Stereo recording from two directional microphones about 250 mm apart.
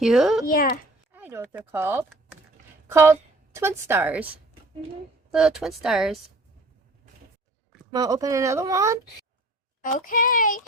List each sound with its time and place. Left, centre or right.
0.0 s speech: centre
0.4 s speech: left
1.1 s a woman's voice: centre
5.3 s speech: centre
7.9 s speech: centre
9.8 s speech: left